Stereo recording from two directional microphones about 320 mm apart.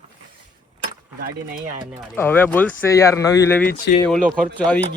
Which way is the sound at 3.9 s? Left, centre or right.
Left.